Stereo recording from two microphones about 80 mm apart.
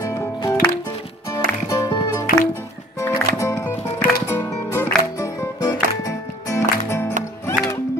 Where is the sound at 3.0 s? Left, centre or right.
Left.